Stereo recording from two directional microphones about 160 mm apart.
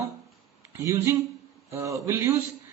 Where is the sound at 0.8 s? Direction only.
20° right (ahead or behind).